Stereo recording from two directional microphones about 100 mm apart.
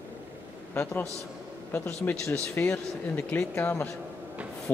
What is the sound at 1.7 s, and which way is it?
Speech, 20° left (ahead or behind).